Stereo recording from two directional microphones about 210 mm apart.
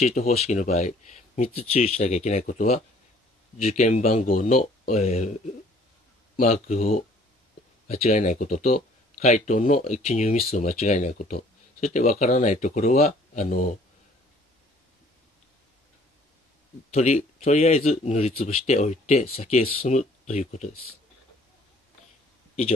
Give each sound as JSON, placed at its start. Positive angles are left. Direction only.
{"t": 0.0, "sound": "speech", "side_deg": 30}
{"t": 6.3, "sound": "speech", "side_deg": 35}
{"t": 16.9, "sound": "speech", "side_deg": 30}